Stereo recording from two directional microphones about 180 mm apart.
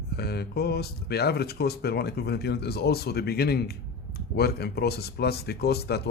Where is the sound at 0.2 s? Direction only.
60° left (ahead or behind).